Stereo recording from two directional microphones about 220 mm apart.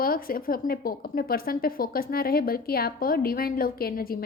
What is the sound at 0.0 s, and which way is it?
A woman's voice, 40° left (ahead or behind).